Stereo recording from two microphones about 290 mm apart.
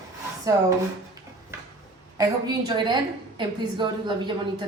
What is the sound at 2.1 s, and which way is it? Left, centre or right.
A woman's voice, centre.